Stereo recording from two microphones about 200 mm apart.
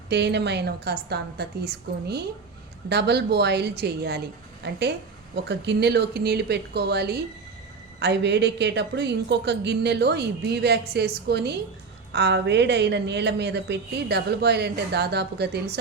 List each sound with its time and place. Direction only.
0.1 s a woman's voice: 60° right (ahead or behind)